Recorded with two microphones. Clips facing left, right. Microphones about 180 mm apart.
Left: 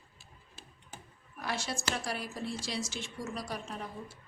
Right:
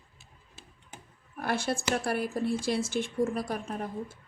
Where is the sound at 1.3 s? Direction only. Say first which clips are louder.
Right 7 dB; 55° right (ahead or behind).